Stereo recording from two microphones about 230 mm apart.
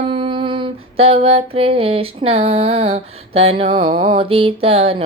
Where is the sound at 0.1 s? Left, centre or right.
Right.